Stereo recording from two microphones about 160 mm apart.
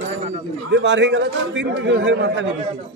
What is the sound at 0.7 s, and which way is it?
A man's voice, 90° right.